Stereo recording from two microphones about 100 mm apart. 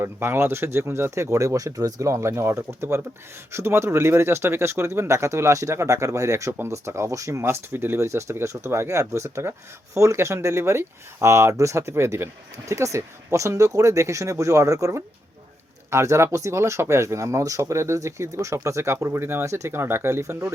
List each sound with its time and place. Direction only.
0.0 s speech: 25° right (ahead or behind)